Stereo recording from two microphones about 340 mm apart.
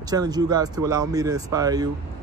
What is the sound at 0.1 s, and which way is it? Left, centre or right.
Speech, centre.